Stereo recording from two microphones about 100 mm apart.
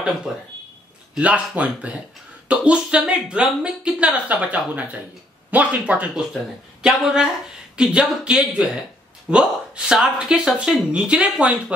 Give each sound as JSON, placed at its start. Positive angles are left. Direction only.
{"t": 1.1, "sound": "speech", "side_deg": -15}